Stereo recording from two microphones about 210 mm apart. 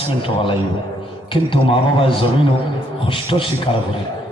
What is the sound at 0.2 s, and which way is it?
A man's voice, 25° left (ahead or behind).